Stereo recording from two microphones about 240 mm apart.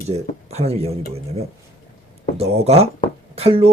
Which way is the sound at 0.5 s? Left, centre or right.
Right.